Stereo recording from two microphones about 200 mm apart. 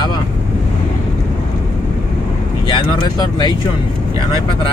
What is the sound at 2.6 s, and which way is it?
Speech, 25° left (ahead or behind).